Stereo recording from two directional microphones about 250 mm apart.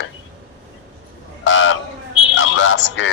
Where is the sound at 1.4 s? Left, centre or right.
Left.